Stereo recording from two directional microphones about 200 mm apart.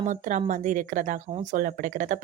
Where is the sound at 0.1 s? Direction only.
40° right (ahead or behind).